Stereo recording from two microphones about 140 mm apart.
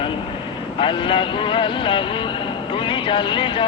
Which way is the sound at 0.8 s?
40° left (ahead or behind).